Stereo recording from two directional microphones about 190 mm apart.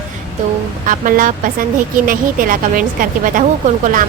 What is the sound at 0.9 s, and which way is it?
Speech, 45° right (ahead or behind).